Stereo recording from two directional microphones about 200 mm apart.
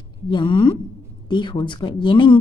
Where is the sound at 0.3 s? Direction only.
25° left (ahead or behind).